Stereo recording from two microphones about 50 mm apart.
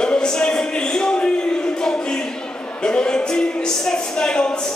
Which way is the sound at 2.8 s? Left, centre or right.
Centre.